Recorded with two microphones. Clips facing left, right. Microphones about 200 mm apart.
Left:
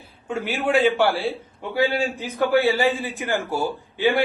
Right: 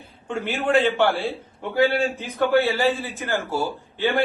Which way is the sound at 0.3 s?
Centre (ahead or behind).